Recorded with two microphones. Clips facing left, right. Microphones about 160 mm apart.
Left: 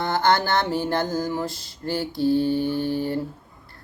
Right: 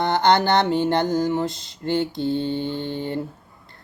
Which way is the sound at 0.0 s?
20° right (ahead or behind).